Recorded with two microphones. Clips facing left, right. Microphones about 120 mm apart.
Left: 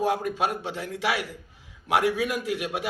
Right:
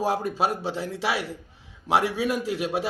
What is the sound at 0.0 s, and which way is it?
Speech, 35° right (ahead or behind).